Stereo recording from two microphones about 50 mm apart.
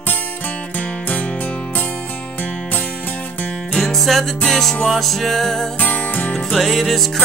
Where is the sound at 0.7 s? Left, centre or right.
Left.